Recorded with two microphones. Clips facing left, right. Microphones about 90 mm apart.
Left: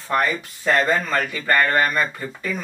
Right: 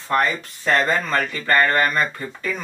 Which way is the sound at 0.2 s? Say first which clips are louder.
Right 1 dB; 10° left (ahead or behind).